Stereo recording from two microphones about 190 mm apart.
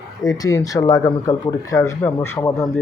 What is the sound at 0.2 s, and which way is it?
Speech, 20° left (ahead or behind).